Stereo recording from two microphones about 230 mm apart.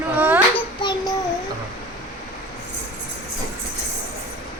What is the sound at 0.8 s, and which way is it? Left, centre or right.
Child singing, centre.